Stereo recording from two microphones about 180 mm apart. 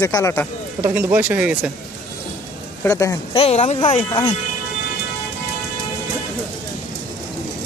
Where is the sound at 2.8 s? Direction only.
20° left (ahead or behind).